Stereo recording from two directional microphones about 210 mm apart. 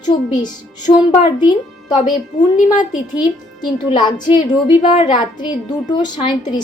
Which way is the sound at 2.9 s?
20° left (ahead or behind).